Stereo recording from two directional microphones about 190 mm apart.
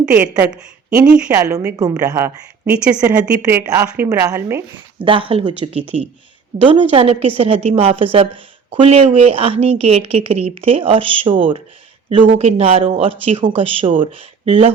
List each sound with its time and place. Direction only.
0.0 s a woman's voice: 5° right (ahead or behind)
1.3 s a woman's voice: 15° right (ahead or behind)
4.9 s a woman's voice: 25° right (ahead or behind)